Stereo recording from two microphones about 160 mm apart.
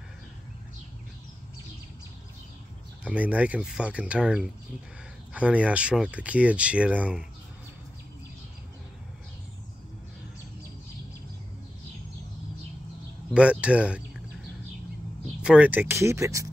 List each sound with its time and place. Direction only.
3.0 s speech: 10° right (ahead or behind)
13.3 s speech: 5° right (ahead or behind)
15.4 s speech: 5° right (ahead or behind)